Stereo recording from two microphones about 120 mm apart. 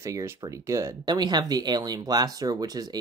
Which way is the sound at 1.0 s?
35° right (ahead or behind).